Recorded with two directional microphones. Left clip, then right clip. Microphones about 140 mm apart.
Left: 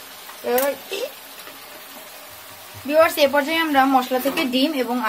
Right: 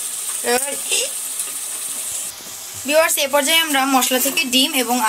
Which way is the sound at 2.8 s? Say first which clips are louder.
Even; 15° right (ahead or behind).